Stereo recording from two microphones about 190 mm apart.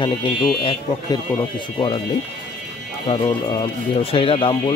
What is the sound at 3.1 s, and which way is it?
Speech, 25° left (ahead or behind).